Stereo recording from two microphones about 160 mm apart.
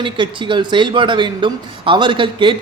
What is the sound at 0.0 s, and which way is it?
A man's voice, 30° right (ahead or behind).